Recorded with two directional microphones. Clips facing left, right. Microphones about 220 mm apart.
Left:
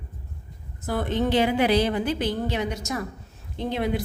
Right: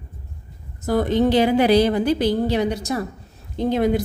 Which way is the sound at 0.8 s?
40° right (ahead or behind).